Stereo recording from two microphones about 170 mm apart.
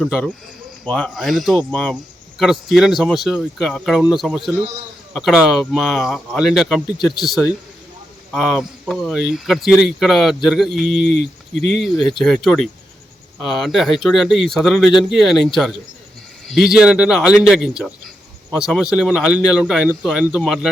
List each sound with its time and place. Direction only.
0.0 s speech: 5° right (ahead or behind)